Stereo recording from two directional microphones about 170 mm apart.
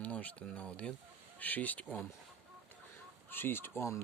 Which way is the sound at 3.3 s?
15° left (ahead or behind).